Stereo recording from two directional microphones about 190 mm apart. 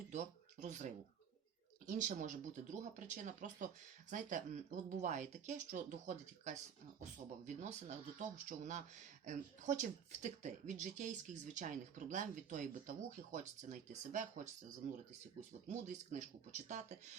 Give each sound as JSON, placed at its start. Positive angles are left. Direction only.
{"t": 0.1, "sound": "speech", "side_deg": -40}
{"t": 1.9, "sound": "speech", "side_deg": -40}